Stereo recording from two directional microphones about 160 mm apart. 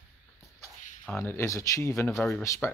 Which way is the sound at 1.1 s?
15° left (ahead or behind).